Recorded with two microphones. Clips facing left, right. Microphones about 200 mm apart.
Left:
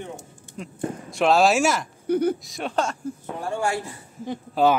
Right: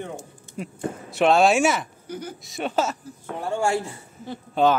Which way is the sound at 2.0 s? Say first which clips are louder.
Left 18 dB; 60° left (ahead or behind).